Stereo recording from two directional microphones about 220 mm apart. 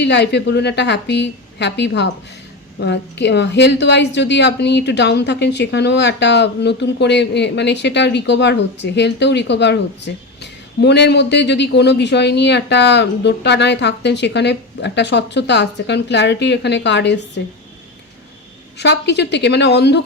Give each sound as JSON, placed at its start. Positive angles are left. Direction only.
{"t": 0.0, "sound": "a woman's voice", "side_deg": 50}
{"t": 18.8, "sound": "a woman's voice", "side_deg": 50}